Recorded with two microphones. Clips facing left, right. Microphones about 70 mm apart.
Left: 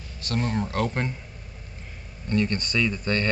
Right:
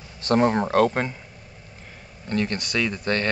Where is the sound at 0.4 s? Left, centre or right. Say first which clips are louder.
Right 7 dB; right.